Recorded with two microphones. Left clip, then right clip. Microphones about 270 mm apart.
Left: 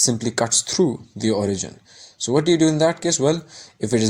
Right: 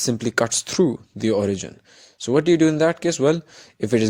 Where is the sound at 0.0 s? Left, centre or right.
Right.